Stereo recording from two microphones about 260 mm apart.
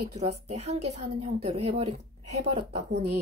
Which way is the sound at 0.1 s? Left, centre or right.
Right.